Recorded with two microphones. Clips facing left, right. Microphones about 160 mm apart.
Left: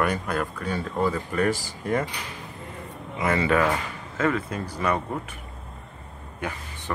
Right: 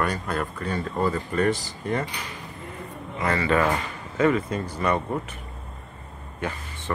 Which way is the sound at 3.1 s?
10° left (ahead or behind).